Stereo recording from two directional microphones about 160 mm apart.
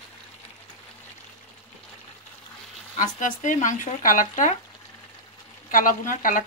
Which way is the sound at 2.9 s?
55° left (ahead or behind).